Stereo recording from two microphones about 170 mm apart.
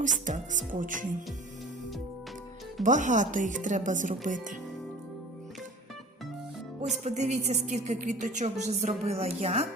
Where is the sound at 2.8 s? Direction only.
45° right (ahead or behind).